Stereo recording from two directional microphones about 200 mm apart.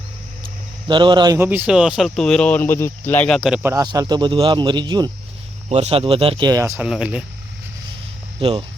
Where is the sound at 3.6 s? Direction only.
15° right (ahead or behind).